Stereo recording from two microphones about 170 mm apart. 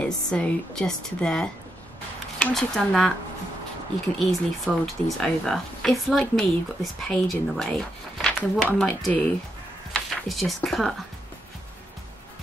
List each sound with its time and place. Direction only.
0.0 s speech: 5° left (ahead or behind)
4.2 s speech: centre (ahead or behind)